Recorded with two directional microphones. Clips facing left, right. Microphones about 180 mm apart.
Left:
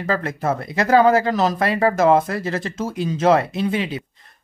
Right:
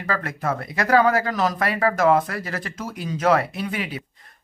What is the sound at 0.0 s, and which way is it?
Speech, 25° left (ahead or behind).